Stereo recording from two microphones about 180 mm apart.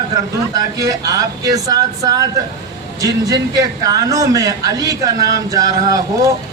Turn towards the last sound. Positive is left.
turn(degrees=-20)  # may be behind; listen again after turning